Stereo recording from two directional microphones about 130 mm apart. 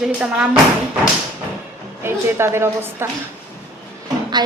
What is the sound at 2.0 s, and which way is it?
A woman's voice, 20° right (ahead or behind).